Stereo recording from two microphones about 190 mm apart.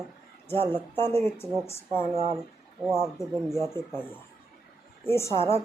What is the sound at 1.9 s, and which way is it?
Speech, 25° right (ahead or behind).